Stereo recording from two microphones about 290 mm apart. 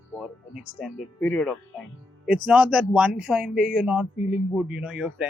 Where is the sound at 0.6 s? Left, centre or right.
Centre.